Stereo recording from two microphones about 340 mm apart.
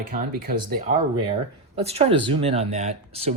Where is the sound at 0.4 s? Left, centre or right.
Right.